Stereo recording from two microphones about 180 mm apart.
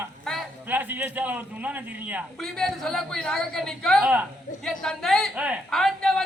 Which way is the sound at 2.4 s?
Centre (ahead or behind).